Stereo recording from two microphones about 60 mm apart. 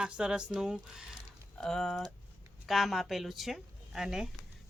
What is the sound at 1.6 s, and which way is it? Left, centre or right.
A woman's voice, centre.